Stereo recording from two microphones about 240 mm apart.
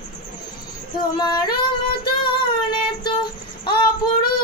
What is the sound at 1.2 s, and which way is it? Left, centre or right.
Female singing, centre.